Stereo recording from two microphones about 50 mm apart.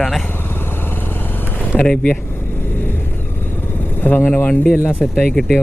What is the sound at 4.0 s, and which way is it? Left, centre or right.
Speech, left.